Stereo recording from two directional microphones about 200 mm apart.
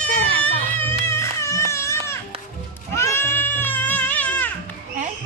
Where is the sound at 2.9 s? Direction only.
10° left (ahead or behind).